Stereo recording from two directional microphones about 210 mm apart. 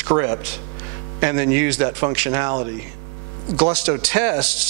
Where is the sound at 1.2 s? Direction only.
10° right (ahead or behind).